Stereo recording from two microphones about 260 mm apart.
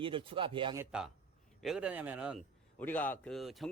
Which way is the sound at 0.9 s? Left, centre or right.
Centre.